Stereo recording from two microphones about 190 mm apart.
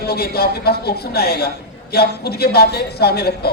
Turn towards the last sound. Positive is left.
turn(degrees=55)  # may be behind; listen again after turning